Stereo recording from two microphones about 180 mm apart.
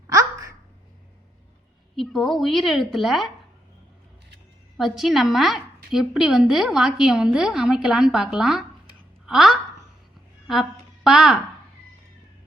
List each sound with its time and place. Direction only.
0.1 s babbling: 15° right (ahead or behind)
2.0 s a woman's voice: centre (ahead or behind)
4.8 s a woman's voice: centre (ahead or behind)